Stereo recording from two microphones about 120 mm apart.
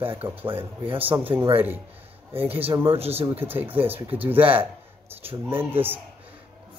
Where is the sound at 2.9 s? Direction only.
55° right (ahead or behind).